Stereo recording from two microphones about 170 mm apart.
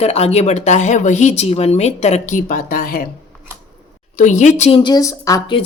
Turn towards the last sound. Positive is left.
turn(degrees=20)  # may be behind; listen again after turning